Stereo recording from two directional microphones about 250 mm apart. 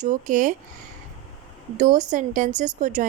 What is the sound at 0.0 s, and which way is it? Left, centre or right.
Speech, right.